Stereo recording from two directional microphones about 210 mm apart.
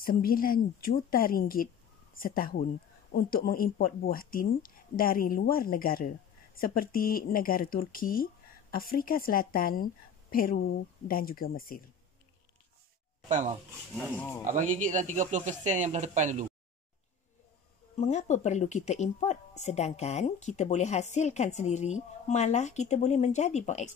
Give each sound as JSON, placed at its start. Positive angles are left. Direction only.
{"t": 0.0, "sound": "speech", "side_deg": 45}
{"t": 13.3, "sound": "speech", "side_deg": -35}
{"t": 14.1, "sound": "speech", "side_deg": 10}
{"t": 14.4, "sound": "speech", "side_deg": -35}
{"t": 17.9, "sound": "speech", "side_deg": 35}